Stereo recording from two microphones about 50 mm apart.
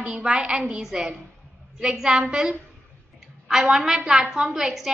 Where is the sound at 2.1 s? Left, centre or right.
Centre.